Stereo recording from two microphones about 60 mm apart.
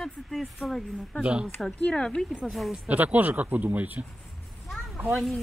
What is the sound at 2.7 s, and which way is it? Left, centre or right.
Speech, right.